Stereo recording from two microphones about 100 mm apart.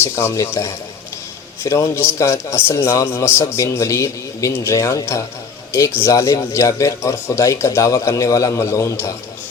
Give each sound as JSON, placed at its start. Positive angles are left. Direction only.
{"t": 0.0, "sound": "a man's voice", "side_deg": 25}